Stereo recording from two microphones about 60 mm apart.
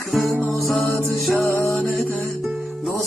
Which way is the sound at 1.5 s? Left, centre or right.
Left.